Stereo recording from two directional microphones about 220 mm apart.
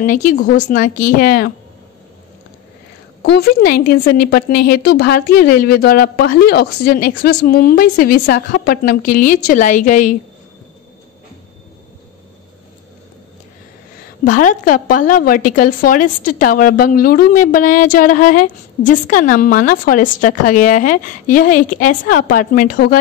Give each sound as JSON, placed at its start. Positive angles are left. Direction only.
{"t": 0.0, "sound": "a woman's voice", "side_deg": 35}
{"t": 3.2, "sound": "a woman's voice", "side_deg": 45}
{"t": 14.2, "sound": "a woman's voice", "side_deg": 35}